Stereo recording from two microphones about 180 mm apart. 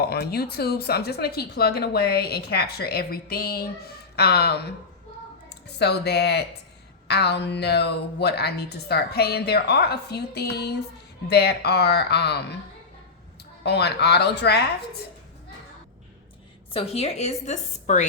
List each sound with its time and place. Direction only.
0.0 s speech: 60° left (ahead or behind)
5.6 s speech: 65° left (ahead or behind)
13.7 s speech: 65° left (ahead or behind)
16.7 s a woman's voice: 35° left (ahead or behind)